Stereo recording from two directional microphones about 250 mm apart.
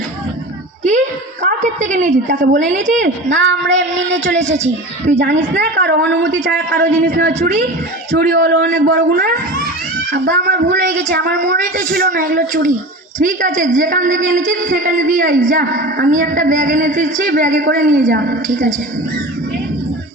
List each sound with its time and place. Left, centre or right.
0.9 s a sound: right
2.8 s speech: right
3.4 s speech: right
4.4 s speech: right
5.5 s speech: right
6.8 s a woman's voice: right
11.4 s a woman's voice: right